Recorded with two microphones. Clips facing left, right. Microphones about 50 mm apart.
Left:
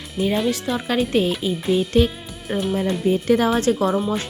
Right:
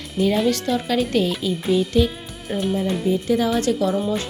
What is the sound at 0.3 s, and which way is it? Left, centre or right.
A woman's voice, centre.